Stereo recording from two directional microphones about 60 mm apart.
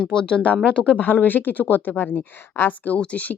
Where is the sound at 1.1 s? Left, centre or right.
Left.